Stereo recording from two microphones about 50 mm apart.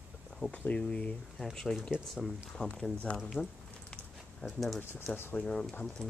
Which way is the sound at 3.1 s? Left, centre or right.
Centre.